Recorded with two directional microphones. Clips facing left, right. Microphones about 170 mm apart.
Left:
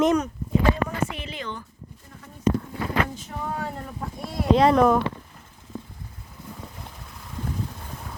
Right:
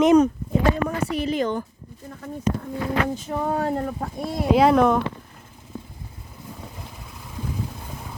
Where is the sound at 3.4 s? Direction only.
45° right (ahead or behind).